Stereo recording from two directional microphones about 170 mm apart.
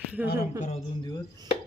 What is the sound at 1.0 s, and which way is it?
Speech, 25° left (ahead or behind).